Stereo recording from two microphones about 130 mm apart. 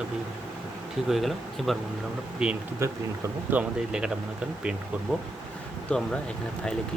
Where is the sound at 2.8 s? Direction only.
20° right (ahead or behind).